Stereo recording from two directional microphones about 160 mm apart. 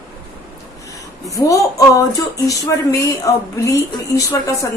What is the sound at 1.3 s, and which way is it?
A woman's voice, 20° left (ahead or behind).